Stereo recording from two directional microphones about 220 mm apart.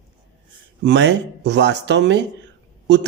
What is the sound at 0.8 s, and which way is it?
Speech, 55° right (ahead or behind).